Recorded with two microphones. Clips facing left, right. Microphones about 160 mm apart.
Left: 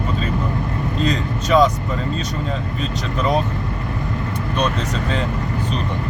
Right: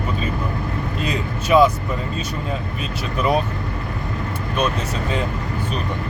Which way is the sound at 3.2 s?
10° right (ahead or behind).